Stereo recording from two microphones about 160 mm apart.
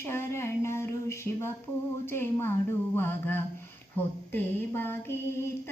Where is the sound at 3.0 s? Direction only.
15° left (ahead or behind).